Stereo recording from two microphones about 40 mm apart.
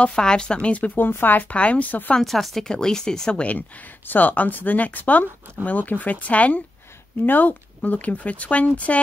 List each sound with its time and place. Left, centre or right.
0.1 s speech: centre
0.7 s speech: left
1.2 s speech: left
1.5 s speech: left
2.2 s speech: centre
2.7 s speech: centre
3.3 s speech: left